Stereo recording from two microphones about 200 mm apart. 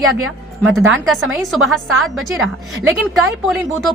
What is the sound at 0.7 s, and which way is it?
A woman's voice, centre (ahead or behind).